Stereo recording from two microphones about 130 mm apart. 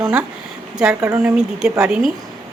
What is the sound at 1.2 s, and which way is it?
Speech, 5° right (ahead or behind).